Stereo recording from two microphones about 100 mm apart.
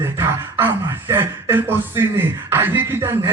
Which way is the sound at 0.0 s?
25° right (ahead or behind).